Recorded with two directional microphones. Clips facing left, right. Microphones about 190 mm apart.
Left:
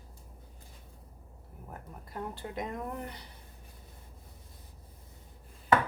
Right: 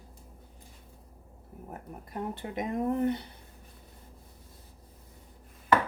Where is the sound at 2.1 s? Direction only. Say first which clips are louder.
Right 3 dB; 20° right (ahead or behind).